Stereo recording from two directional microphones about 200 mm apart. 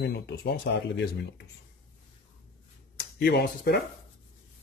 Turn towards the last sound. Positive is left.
turn(degrees=55)  # may be behind; listen again after turning